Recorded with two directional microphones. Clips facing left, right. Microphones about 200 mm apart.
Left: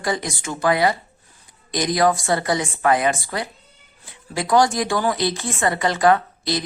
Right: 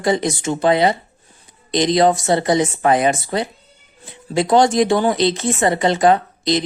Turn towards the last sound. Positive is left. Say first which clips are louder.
# right 3 dB
turn(degrees=-20)  # may be behind; listen again after turning